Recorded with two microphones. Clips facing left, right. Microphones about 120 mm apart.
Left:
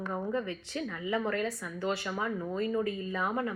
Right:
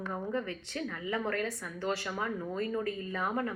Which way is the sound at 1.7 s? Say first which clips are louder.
Left 1 dB; 40° right (ahead or behind).